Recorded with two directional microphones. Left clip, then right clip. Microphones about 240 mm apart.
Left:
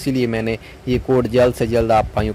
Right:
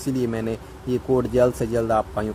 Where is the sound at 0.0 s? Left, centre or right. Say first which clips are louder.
Left 5 dB; centre.